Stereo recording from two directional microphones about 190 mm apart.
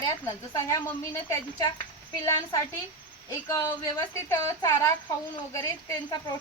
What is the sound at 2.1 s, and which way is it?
A woman's voice, 15° left (ahead or behind).